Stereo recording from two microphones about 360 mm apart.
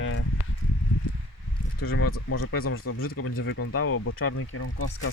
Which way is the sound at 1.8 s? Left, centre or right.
Left.